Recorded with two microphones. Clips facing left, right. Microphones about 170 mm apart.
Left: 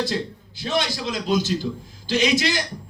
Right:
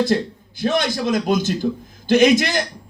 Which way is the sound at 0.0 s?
50° right (ahead or behind).